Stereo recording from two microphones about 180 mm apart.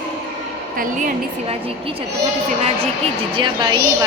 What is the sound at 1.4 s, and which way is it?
Speech, 35° right (ahead or behind).